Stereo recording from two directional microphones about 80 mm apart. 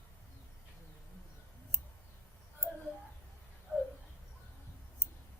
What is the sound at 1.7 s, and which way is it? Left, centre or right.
Clicking, left.